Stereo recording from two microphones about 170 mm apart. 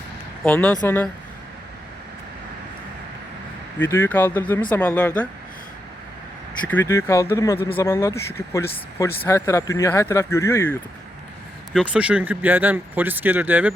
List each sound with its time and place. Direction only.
0.4 s speech: 10° left (ahead or behind)
3.8 s speech: 15° left (ahead or behind)
6.7 s speech: 15° left (ahead or behind)
11.9 s speech: 5° right (ahead or behind)